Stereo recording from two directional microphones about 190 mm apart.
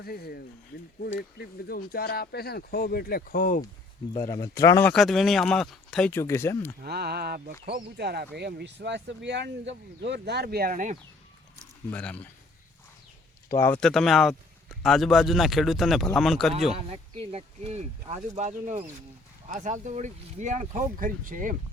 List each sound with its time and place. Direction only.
0.0 s speech: 55° left (ahead or behind)
4.1 s speech: 20° left (ahead or behind)
4.9 s speech: centre (ahead or behind)
6.8 s speech: 55° right (ahead or behind)
11.9 s speech: 10° left (ahead or behind)
13.5 s speech: 10° left (ahead or behind)
16.7 s speech: 35° right (ahead or behind)